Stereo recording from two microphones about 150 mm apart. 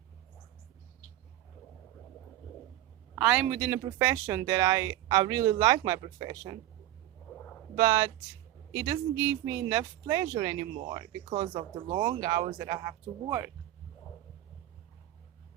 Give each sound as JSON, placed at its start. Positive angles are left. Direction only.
{"t": 3.2, "sound": "a man's voice", "side_deg": -5}
{"t": 7.8, "sound": "speech", "side_deg": -20}